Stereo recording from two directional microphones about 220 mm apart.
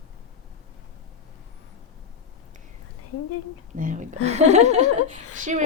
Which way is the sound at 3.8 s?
35° right (ahead or behind).